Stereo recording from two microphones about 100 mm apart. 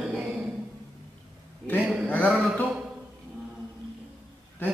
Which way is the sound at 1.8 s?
5° right (ahead or behind).